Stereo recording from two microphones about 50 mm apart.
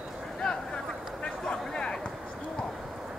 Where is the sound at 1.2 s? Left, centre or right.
Centre.